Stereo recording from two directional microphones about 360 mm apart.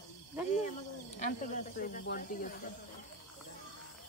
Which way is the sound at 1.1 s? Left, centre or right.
Left.